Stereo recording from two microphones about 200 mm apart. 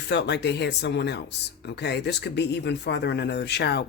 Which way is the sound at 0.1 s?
60° left (ahead or behind).